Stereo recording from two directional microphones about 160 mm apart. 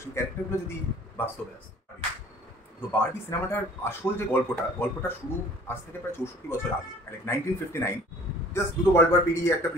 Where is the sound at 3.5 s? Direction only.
15° left (ahead or behind).